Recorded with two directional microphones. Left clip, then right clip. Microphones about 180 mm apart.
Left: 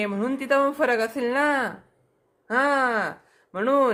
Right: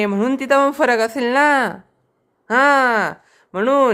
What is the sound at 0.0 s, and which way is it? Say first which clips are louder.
Speech: right 8 dB; 40° right (ahead or behind).